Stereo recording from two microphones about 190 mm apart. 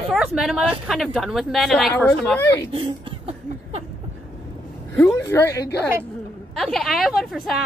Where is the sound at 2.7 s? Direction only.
25° right (ahead or behind).